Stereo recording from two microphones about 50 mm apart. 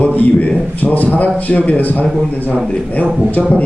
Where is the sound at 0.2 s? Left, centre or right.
Left.